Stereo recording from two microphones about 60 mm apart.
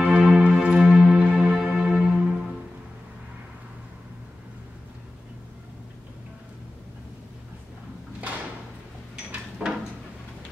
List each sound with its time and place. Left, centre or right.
0.0 s music: centre
0.9 s music: right
9.1 s a sound: centre